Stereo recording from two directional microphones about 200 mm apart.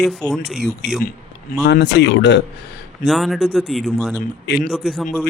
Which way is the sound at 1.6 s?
60° left (ahead or behind).